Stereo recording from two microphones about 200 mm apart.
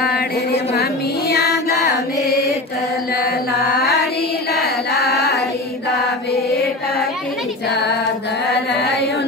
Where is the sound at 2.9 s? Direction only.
50° left (ahead or behind).